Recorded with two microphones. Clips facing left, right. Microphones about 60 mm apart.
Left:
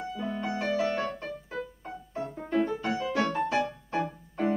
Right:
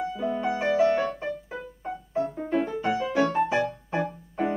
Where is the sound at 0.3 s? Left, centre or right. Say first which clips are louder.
Right 5 dB; centre.